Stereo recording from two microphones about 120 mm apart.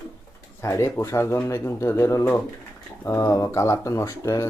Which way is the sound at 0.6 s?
25° left (ahead or behind).